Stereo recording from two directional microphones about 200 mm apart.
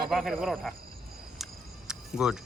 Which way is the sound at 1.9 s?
5° right (ahead or behind).